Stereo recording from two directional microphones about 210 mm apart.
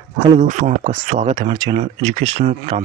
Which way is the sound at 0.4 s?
35° right (ahead or behind).